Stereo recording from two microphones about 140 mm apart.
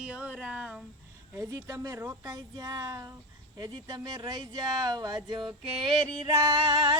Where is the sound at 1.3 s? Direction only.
20° right (ahead or behind).